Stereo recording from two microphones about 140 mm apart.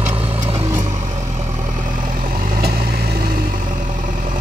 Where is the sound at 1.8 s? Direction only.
75° right (ahead or behind); by 3.5 s 90° right.